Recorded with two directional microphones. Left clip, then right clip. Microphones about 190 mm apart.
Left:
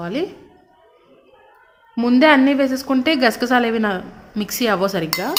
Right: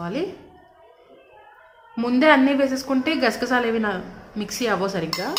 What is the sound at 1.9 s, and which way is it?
A woman's voice, 35° left (ahead or behind).